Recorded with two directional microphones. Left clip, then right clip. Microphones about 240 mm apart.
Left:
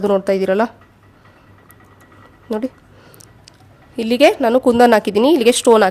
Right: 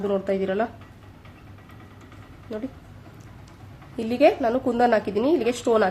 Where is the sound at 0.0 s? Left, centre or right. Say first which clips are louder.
Left 9 dB; left.